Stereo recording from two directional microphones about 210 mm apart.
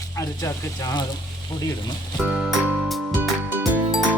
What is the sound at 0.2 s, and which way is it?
Speech, 15° left (ahead or behind).